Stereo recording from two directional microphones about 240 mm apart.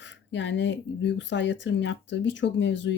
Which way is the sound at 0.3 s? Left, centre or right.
Left.